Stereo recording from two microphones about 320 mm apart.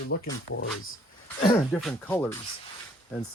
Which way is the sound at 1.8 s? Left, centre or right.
Centre.